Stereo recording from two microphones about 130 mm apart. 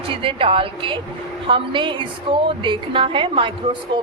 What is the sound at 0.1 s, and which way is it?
A woman's voice, 45° right (ahead or behind).